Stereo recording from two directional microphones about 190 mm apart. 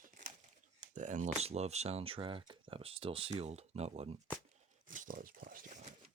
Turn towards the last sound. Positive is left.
turn(degrees=-40)  # may be behind; listen again after turning